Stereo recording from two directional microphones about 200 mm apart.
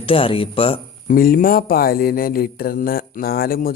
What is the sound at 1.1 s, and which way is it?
Mantra, 45° left (ahead or behind).